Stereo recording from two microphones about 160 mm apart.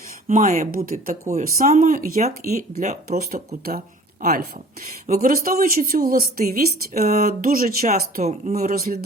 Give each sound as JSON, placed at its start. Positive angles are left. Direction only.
{"t": 0.3, "sound": "speech", "side_deg": -50}
{"t": 1.4, "sound": "speech", "side_deg": -55}
{"t": 2.5, "sound": "speech", "side_deg": -45}
{"t": 3.2, "sound": "speech", "side_deg": -70}
{"t": 8.2, "sound": "speech", "side_deg": -45}
{"t": 8.7, "sound": "speech", "side_deg": -70}